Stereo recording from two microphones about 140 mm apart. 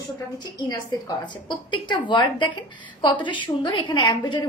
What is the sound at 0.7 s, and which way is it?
A woman's voice, 30° left (ahead or behind).